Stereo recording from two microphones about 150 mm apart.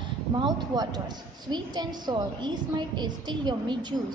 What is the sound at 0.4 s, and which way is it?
A woman's voice, 30° right (ahead or behind).